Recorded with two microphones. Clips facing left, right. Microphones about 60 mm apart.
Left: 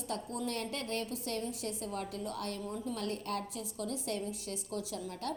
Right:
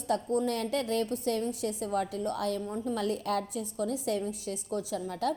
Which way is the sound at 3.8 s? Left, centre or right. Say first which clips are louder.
Right 6 dB; right.